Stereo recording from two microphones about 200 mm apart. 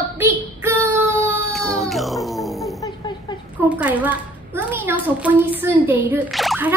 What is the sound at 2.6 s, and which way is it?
Snoring, 15° left (ahead or behind).